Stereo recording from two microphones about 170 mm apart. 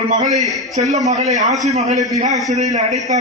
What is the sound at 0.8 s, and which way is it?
A man's voice, 40° right (ahead or behind).